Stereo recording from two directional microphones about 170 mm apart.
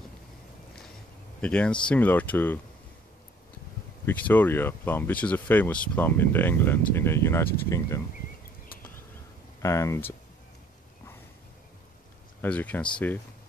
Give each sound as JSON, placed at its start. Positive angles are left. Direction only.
{"t": 1.4, "sound": "speech", "side_deg": 5}
{"t": 4.0, "sound": "speech", "side_deg": 10}
{"t": 9.6, "sound": "speech", "side_deg": 15}
{"t": 12.4, "sound": "speech", "side_deg": 10}